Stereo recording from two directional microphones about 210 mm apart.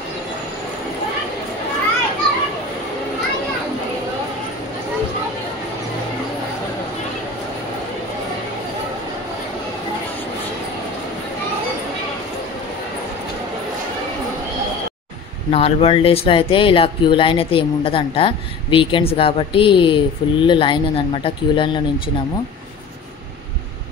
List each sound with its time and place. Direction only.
15.5 s speech: 25° left (ahead or behind)